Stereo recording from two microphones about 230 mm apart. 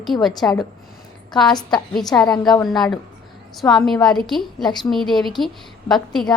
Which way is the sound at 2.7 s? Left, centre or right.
Centre.